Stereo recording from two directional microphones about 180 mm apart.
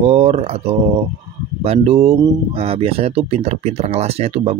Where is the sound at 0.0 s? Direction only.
35° right (ahead or behind).